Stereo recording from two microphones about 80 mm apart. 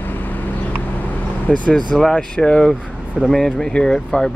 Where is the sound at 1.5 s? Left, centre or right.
Centre.